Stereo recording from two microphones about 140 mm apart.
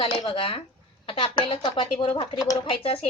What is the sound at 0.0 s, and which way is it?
Speech, 40° left (ahead or behind).